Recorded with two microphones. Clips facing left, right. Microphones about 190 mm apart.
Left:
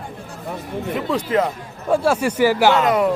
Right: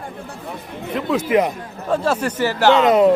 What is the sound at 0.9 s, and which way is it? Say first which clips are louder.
Speech: right 3 dB; 5° right (ahead or behind).